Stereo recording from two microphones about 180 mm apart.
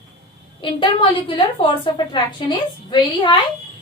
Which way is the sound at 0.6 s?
30° left (ahead or behind).